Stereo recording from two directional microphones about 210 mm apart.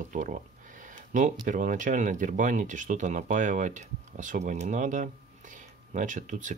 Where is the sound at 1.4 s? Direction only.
40° right (ahead or behind).